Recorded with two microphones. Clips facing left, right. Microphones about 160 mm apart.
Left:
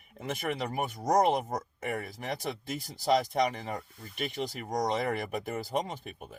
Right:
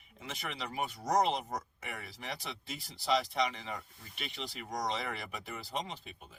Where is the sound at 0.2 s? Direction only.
50° left (ahead or behind).